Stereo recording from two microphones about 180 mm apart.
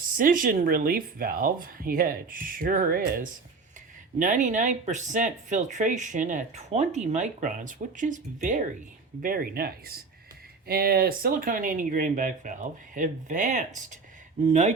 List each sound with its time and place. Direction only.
0.2 s speech: 50° right (ahead or behind)